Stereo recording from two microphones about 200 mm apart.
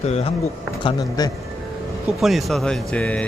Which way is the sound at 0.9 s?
20° left (ahead or behind).